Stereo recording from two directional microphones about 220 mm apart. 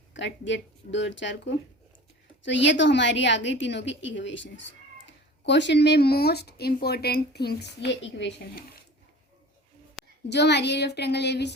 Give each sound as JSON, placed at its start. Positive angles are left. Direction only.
{"t": 0.1, "sound": "a woman's voice", "side_deg": 55}
{"t": 10.2, "sound": "a woman's voice", "side_deg": 50}